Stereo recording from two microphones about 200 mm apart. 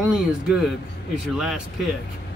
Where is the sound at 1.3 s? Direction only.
5° right (ahead or behind).